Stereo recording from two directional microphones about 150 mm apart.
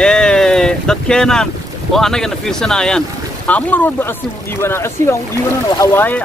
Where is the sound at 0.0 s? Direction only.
5° left (ahead or behind).